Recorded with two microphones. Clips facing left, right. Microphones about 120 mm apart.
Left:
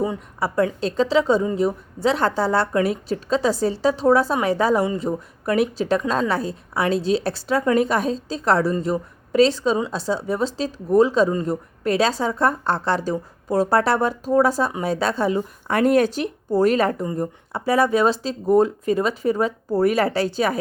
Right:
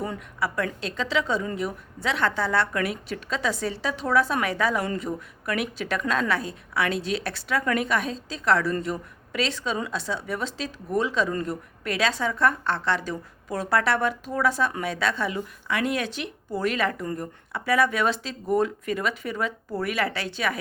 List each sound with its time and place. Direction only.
0.3 s a woman's voice: 35° left (ahead or behind)